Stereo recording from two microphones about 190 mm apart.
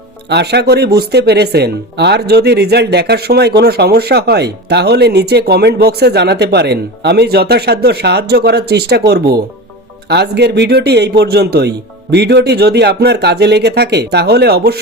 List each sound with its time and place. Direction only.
0.3 s speech: 60° right (ahead or behind)